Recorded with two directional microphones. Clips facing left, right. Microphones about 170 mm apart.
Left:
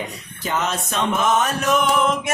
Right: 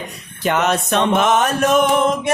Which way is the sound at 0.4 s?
70° right (ahead or behind).